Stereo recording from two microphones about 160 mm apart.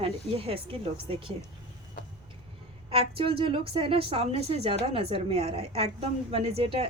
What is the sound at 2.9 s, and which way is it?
A woman's voice, 35° right (ahead or behind).